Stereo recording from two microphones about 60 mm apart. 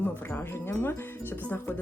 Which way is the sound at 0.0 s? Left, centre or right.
Left.